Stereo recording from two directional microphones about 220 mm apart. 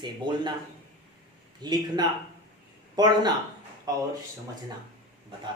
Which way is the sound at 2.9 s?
20° right (ahead or behind).